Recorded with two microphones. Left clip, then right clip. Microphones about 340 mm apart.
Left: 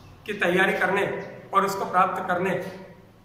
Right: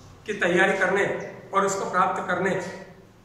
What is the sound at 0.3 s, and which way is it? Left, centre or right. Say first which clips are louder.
A man's voice: right 1 dB; centre.